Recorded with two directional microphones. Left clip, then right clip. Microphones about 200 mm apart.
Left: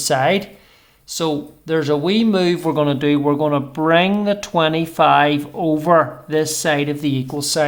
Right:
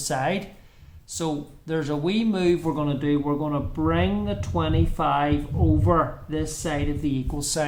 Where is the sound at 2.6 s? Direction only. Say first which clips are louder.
Left 8 dB; 40° left (ahead or behind).